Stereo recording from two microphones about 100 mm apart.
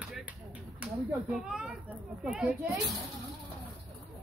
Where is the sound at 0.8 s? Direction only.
15° right (ahead or behind).